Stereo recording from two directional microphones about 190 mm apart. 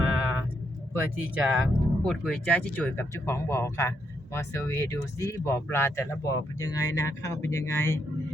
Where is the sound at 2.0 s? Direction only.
5° left (ahead or behind).